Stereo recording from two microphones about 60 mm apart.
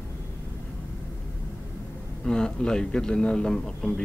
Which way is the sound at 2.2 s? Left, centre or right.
Centre.